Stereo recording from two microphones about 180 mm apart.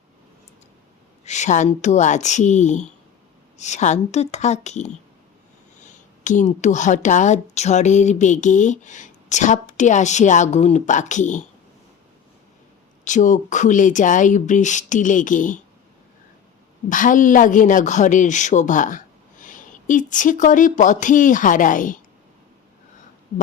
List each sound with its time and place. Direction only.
1.2 s a woman's voice: 40° left (ahead or behind)
13.1 s a woman's voice: 45° left (ahead or behind)
16.9 s a woman's voice: 45° left (ahead or behind)